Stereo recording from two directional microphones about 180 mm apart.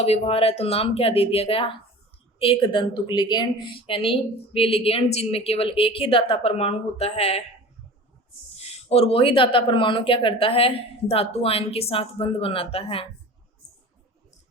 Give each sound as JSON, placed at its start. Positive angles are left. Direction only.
{"t": 0.0, "sound": "speech", "side_deg": 35}
{"t": 8.5, "sound": "speech", "side_deg": 35}